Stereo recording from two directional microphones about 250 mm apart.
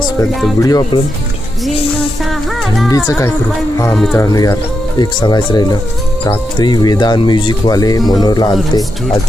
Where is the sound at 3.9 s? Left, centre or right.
Centre.